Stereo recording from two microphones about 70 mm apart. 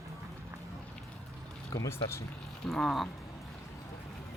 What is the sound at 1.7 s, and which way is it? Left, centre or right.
Speech, left.